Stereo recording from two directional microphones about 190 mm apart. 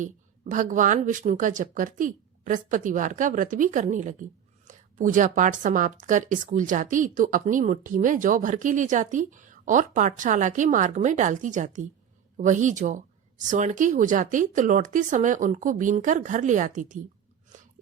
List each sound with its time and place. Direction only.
0.0 s speech: 40° right (ahead or behind)